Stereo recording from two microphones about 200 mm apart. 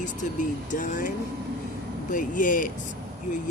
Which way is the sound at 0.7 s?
40° left (ahead or behind).